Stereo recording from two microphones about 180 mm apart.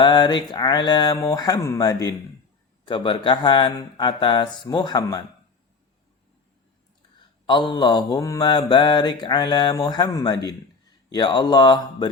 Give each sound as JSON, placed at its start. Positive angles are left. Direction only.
{"t": 0.0, "sound": "mantra", "side_deg": 25}
{"t": 7.4, "sound": "mantra", "side_deg": 25}